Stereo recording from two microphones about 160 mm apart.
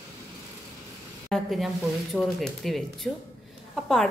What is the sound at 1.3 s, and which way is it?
A woman's voice, centre (ahead or behind).